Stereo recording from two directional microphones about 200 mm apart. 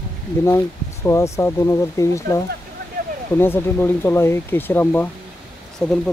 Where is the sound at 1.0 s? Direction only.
15° left (ahead or behind).